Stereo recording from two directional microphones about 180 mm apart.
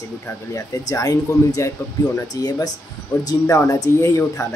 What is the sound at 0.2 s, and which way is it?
Speech, 15° left (ahead or behind).